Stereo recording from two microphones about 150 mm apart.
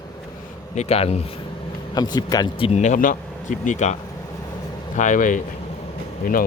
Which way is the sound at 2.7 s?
55° left (ahead or behind).